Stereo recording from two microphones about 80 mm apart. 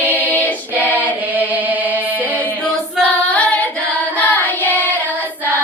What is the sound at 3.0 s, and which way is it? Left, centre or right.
Singing, centre.